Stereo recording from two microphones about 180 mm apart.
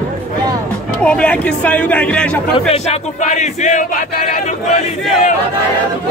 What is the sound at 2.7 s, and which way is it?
Battle cry, 40° left (ahead or behind).